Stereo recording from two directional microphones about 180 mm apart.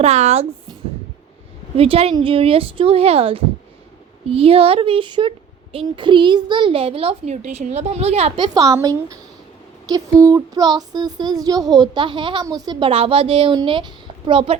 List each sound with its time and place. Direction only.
0.0 s a child's voice: 35° right (ahead or behind)
1.7 s a child's voice: 35° right (ahead or behind)
8.5 s child singing: 20° right (ahead or behind)